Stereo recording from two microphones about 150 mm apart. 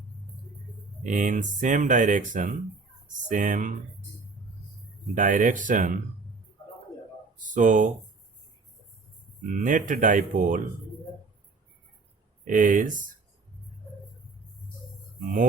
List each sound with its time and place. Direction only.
1.0 s speech: 55° right (ahead or behind)
5.1 s speech: 60° right (ahead or behind)
7.3 s a sound: 60° right (ahead or behind)
9.5 s speech: 60° right (ahead or behind)
12.5 s speech: 60° right (ahead or behind)